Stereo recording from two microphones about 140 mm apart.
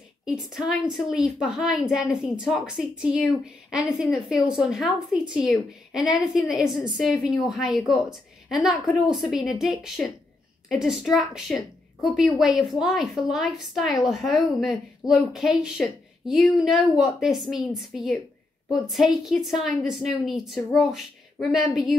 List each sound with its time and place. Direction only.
0.2 s a woman's voice: 5° right (ahead or behind)